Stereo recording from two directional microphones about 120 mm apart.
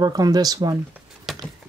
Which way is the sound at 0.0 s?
35° right (ahead or behind).